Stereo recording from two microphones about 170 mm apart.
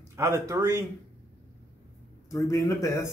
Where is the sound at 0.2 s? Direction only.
15° right (ahead or behind).